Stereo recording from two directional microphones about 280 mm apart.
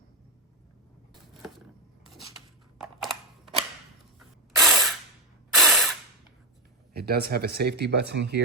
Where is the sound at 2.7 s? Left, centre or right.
Centre.